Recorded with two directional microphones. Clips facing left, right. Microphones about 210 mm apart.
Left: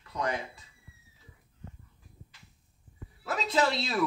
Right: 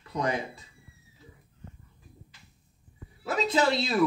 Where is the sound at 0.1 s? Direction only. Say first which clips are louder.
Right 3 dB; 15° right (ahead or behind).